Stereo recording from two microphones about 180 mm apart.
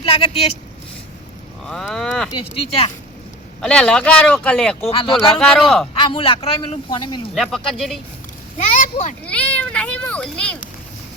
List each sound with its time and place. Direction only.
0.0 s speech: 30° left (ahead or behind)
1.6 s speech: 5° left (ahead or behind)
2.6 s speech: 30° left (ahead or behind)
3.6 s speech: 5° left (ahead or behind)
4.9 s speech: 30° left (ahead or behind)
5.3 s speech: 5° left (ahead or behind)
5.9 s speech: 30° left (ahead or behind)
7.3 s speech: centre (ahead or behind)
8.5 s speech: 45° left (ahead or behind)
9.2 s a child's voice: 5° left (ahead or behind)